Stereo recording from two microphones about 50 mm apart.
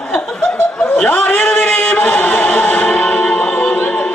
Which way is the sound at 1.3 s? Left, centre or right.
Left.